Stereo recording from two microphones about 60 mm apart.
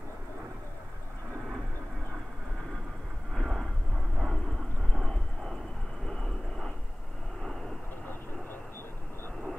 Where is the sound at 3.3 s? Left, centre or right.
Centre.